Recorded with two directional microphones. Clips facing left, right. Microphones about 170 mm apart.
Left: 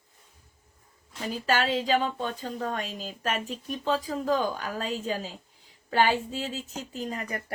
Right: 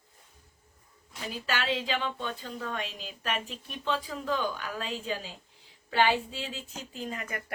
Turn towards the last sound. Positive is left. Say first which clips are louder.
# left 3 dB
turn(degrees=35)  # may be behind; listen again after turning